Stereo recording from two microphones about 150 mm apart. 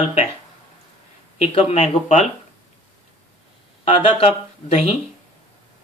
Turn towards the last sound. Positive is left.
turn(degrees=45)  # may be behind; listen again after turning